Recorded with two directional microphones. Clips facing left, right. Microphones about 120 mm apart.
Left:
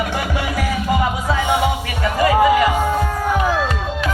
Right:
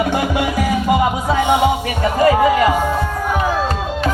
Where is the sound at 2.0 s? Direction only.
35° right (ahead or behind).